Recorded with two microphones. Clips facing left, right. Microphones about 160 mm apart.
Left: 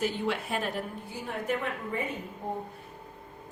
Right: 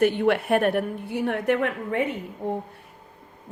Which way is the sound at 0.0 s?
60° right (ahead or behind).